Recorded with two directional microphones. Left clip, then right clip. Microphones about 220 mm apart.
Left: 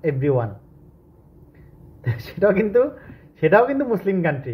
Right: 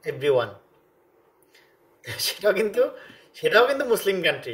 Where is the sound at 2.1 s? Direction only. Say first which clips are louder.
Left 3 dB; 25° right (ahead or behind).